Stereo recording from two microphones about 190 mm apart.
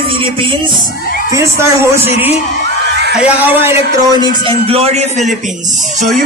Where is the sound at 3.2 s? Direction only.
10° right (ahead or behind).